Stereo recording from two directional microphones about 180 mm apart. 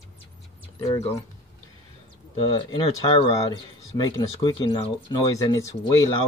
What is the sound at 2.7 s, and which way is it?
Speech, 30° left (ahead or behind).